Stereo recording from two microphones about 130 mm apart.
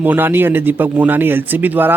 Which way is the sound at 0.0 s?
15° right (ahead or behind).